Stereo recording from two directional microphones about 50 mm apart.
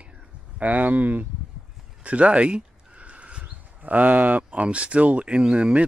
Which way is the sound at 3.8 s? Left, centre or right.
Right.